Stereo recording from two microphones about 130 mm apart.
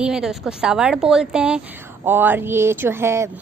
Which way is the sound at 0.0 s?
5° right (ahead or behind).